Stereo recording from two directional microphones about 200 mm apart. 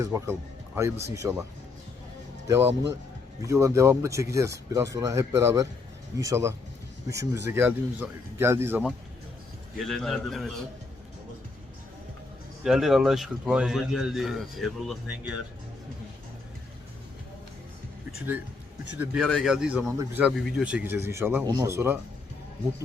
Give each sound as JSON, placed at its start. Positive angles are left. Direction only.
{"t": 0.0, "sound": "speech", "side_deg": -15}
{"t": 2.5, "sound": "speech", "side_deg": -15}
{"t": 9.7, "sound": "a man's voice", "side_deg": 0}
{"t": 12.6, "sound": "a man's voice", "side_deg": 0}
{"t": 18.9, "sound": "a man's voice", "side_deg": 0}